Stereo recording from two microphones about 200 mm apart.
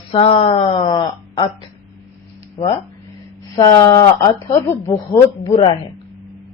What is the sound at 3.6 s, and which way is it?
Speech, 20° left (ahead or behind).